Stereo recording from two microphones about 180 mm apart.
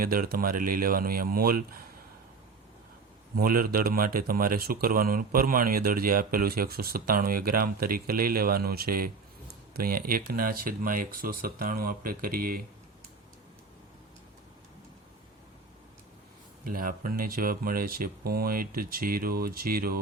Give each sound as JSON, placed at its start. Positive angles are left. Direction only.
{"t": 0.0, "sound": "speech", "side_deg": -55}
{"t": 3.3, "sound": "speech", "side_deg": -55}
{"t": 16.6, "sound": "speech", "side_deg": -50}